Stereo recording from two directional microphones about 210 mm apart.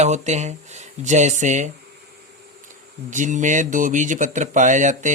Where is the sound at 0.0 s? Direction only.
35° right (ahead or behind).